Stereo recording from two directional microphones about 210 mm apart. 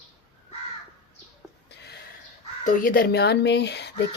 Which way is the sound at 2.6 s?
40° left (ahead or behind).